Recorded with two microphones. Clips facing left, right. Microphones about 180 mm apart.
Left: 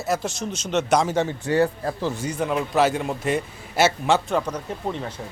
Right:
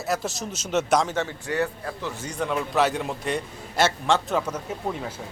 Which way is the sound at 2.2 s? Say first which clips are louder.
Left 3 dB; 5° left (ahead or behind).